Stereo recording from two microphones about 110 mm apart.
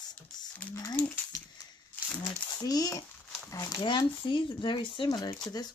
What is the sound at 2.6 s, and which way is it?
Speech, 35° left (ahead or behind).